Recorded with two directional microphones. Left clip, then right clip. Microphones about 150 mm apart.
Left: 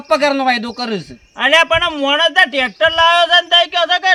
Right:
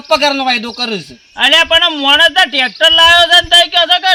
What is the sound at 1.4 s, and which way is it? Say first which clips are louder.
A man's voice: right 3 dB; 30° left (ahead or behind).